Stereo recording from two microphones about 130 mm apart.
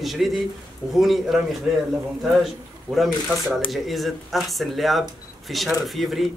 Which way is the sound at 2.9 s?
Centre (ahead or behind).